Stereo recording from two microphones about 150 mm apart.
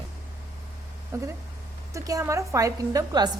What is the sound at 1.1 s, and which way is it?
A woman's voice, 20° right (ahead or behind).